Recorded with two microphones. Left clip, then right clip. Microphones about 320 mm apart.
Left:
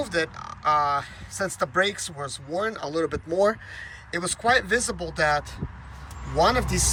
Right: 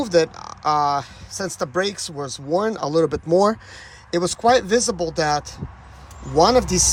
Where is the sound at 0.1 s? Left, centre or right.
Centre.